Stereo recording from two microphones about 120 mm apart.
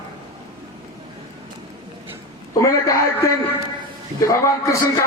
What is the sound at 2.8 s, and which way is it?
A man's voice, 25° left (ahead or behind).